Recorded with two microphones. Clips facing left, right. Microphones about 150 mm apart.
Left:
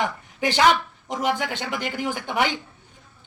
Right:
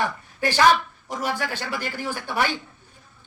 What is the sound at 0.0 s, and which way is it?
A man's voice, 20° left (ahead or behind).